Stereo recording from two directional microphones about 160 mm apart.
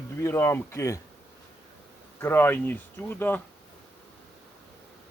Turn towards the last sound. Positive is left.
turn(degrees=10)  # may be behind; listen again after turning